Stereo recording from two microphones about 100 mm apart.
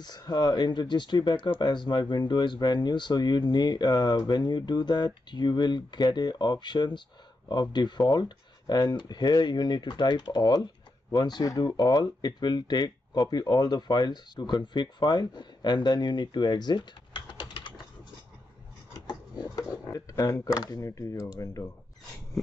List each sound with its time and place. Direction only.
0.0 s speech: 45° left (ahead or behind)
18.9 s a sound: 45° left (ahead or behind)
20.5 s speech: 40° left (ahead or behind)